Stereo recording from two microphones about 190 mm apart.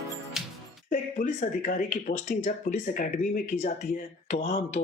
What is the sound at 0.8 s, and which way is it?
Speech, 45° left (ahead or behind).